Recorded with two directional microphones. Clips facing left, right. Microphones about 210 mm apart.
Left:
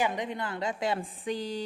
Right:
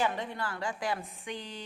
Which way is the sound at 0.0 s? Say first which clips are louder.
Left 2 dB; 15° left (ahead or behind).